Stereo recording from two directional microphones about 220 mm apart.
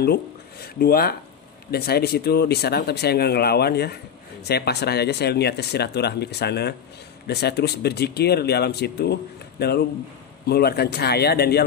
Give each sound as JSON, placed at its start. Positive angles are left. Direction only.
{"t": 0.0, "sound": "speech", "side_deg": 45}